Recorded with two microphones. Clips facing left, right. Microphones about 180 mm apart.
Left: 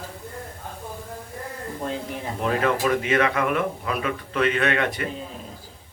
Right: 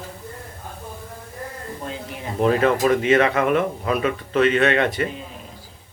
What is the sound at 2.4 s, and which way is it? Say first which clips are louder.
Speech: right 5 dB; 25° right (ahead or behind).